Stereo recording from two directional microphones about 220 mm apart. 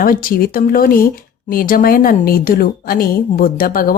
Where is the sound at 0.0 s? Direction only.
40° left (ahead or behind).